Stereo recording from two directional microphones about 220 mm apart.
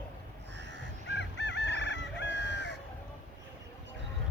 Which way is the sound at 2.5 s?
50° right (ahead or behind).